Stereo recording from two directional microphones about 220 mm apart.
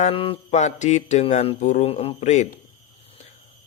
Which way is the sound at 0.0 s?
25° left (ahead or behind).